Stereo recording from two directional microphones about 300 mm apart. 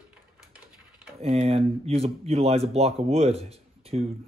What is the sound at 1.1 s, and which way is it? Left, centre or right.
Speech, centre.